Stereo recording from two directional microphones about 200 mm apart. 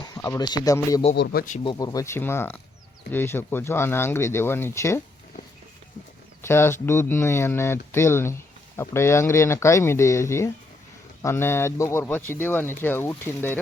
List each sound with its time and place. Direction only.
0.0 s speech: 20° left (ahead or behind)
1.1 s speech: 55° left (ahead or behind)
1.6 s speech: 20° left (ahead or behind)
6.4 s speech: 10° left (ahead or behind)